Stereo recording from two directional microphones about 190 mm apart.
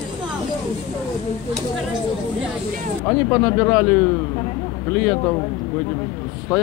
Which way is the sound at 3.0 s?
15° left (ahead or behind).